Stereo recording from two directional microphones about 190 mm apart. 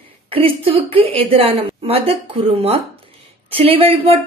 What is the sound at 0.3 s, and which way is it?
Speech, 30° right (ahead or behind).